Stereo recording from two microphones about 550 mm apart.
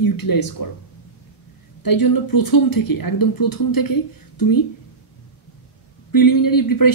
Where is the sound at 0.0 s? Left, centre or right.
Left.